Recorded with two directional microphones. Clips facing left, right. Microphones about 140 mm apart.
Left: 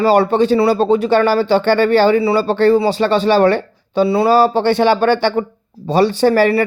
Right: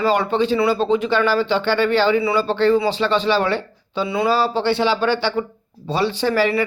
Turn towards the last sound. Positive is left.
turn(degrees=50)  # may be behind; listen again after turning